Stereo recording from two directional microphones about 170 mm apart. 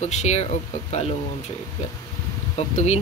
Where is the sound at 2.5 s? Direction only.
40° left (ahead or behind).